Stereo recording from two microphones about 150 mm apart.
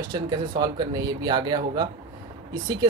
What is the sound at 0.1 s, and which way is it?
Speech, 25° right (ahead or behind).